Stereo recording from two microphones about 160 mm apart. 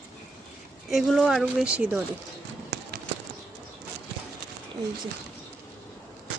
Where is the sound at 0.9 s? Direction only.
Centre (ahead or behind).